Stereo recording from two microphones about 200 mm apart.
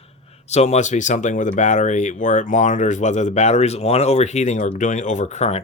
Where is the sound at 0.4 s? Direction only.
35° left (ahead or behind).